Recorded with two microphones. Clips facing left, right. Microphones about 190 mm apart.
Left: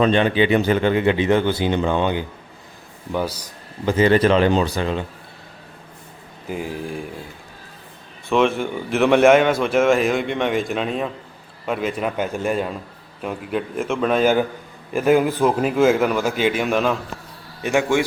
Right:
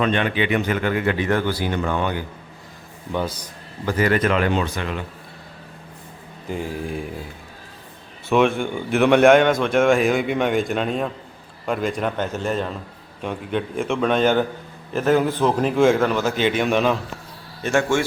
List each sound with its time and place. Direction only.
0.0 s speech: 30° left (ahead or behind)
3.1 s a man's voice: 10° left (ahead or behind)
3.9 s speech: 25° left (ahead or behind)
6.5 s speech: 5° left (ahead or behind)
8.3 s a man's voice: centre (ahead or behind)
17.6 s a man's voice: 15° left (ahead or behind)